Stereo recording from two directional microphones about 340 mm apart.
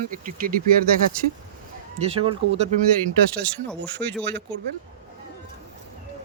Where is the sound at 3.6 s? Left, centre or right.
Centre.